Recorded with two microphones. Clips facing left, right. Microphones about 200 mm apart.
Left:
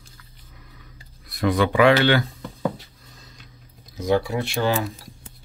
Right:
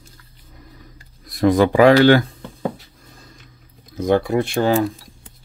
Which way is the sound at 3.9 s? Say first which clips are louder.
Right 4 dB; 55° right (ahead or behind).